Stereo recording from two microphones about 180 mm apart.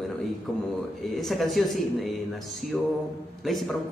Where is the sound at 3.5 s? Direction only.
Centre (ahead or behind).